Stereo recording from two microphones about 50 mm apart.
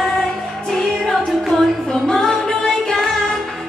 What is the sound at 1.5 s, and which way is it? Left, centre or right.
Music, centre.